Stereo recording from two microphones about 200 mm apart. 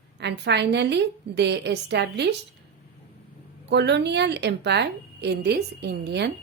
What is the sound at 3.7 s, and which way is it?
A woman's voice, 60° right (ahead or behind).